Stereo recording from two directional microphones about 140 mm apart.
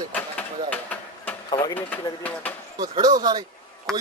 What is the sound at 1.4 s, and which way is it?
Speech, 30° left (ahead or behind).